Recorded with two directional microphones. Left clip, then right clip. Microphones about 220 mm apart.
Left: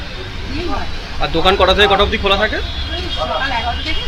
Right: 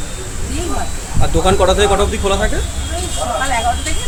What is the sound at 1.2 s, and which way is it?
Speech, 10° right (ahead or behind).